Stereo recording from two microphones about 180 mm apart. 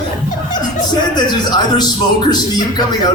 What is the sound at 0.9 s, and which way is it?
A man's voice, 25° left (ahead or behind).